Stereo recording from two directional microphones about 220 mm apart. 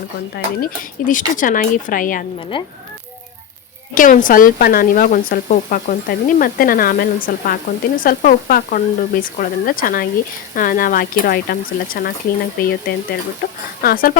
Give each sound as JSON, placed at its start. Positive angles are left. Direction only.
{"t": 0.3, "sound": "speech", "side_deg": 40}
{"t": 2.5, "sound": "speech", "side_deg": 20}
{"t": 3.9, "sound": "speech", "side_deg": 35}